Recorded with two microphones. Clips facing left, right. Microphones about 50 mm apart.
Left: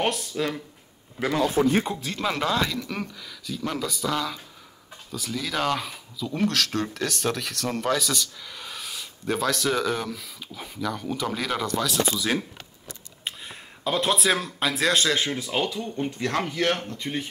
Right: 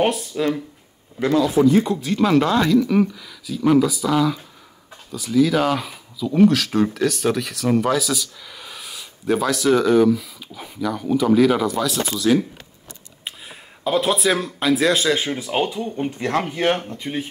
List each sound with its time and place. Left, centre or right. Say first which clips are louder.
0.0 s speech: right 6 dB; centre
1.3 s speech: right 6 dB; left
2.0 s speech: right 10 dB; centre
13.2 s speech: even; centre
15.3 s speech: right 5 dB; right